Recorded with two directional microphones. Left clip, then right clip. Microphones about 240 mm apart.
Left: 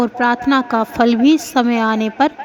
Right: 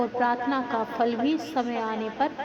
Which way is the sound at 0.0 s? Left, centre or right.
Left.